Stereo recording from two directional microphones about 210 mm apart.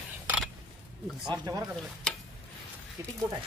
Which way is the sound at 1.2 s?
20° right (ahead or behind).